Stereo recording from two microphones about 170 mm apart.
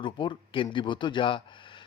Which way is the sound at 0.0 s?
30° left (ahead or behind).